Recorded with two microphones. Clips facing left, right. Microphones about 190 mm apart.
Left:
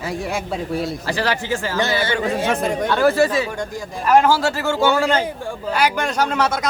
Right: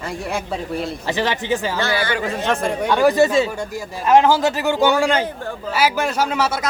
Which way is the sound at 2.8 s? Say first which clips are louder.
Right 2 dB; 15° right (ahead or behind).